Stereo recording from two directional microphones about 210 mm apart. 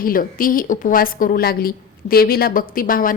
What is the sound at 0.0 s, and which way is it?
A woman's voice, 40° left (ahead or behind).